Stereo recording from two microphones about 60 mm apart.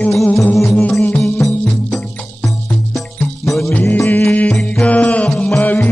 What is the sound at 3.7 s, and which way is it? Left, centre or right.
Music, left.